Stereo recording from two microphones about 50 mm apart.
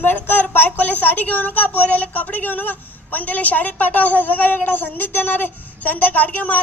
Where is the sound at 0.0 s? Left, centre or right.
Left.